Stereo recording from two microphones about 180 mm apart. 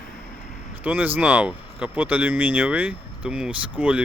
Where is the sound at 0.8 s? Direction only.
10° right (ahead or behind).